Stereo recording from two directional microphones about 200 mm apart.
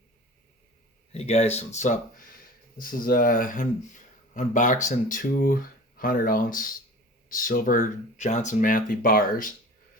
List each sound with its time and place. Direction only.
1.1 s speech: 35° left (ahead or behind)